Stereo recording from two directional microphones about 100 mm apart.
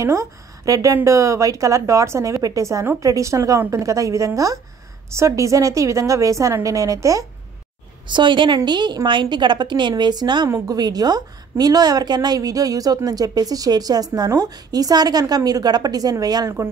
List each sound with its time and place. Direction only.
0.0 s a woman's voice: 30° right (ahead or behind)
8.1 s a woman's voice: 50° right (ahead or behind)